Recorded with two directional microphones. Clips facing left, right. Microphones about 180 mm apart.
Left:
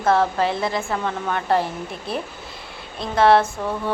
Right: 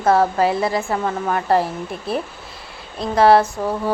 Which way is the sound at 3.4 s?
30° right (ahead or behind).